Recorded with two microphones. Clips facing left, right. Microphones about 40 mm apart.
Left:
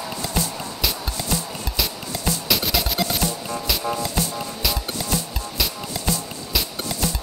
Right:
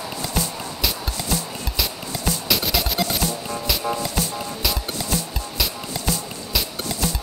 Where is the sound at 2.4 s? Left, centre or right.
Centre.